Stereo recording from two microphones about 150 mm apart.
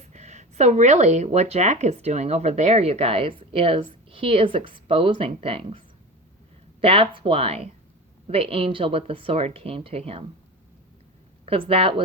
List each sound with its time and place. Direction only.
0.1 s speech: 50° right (ahead or behind)
6.8 s a woman's voice: 35° right (ahead or behind)
11.4 s a woman's voice: 40° right (ahead or behind)